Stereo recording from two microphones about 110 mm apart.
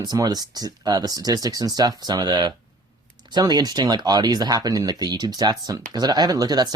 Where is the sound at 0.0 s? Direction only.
35° right (ahead or behind).